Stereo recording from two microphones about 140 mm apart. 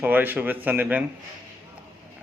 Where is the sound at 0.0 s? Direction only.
15° right (ahead or behind).